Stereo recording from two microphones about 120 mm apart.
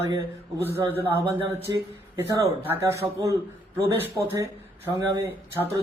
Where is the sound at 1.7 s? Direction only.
35° right (ahead or behind).